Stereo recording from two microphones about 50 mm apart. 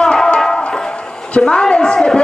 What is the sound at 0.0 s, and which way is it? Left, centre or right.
Music, centre.